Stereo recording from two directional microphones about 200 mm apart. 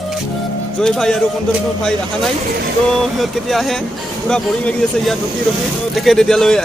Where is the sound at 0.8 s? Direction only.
5° left (ahead or behind).